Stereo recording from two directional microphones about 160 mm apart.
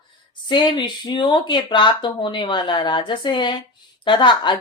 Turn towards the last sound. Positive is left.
turn(degrees=30)  # may be behind; listen again after turning